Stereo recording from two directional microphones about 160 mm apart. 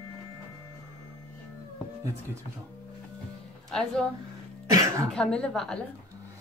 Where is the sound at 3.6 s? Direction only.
5° left (ahead or behind).